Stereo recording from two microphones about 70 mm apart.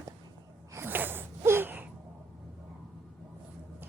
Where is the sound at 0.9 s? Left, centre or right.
Right.